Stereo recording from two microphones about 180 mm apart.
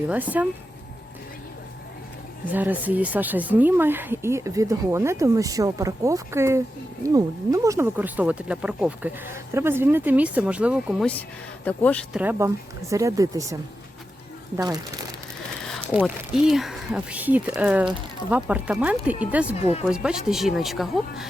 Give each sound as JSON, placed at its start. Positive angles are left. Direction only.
{"t": 0.1, "sound": "speech", "side_deg": -10}
{"t": 2.5, "sound": "speech", "side_deg": -10}
{"t": 11.6, "sound": "speech", "side_deg": 10}
{"t": 12.1, "sound": "speech", "side_deg": -10}
{"t": 16.0, "sound": "speech", "side_deg": 0}